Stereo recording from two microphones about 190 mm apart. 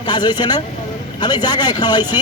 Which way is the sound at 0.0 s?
25° left (ahead or behind).